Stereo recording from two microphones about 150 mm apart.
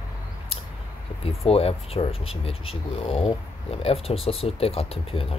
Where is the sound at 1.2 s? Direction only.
40° left (ahead or behind).